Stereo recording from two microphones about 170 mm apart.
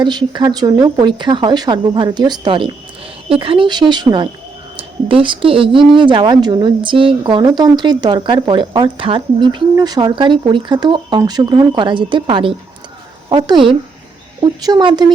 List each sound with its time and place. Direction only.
0.0 s speech: 25° right (ahead or behind)